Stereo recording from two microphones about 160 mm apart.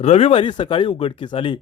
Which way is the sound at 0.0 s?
40° left (ahead or behind).